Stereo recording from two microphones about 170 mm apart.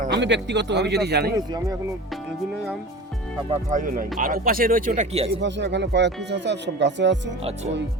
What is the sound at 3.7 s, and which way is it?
Speech, 55° right (ahead or behind).